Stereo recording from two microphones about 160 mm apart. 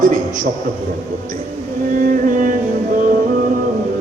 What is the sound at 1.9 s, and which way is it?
Music, 55° right (ahead or behind).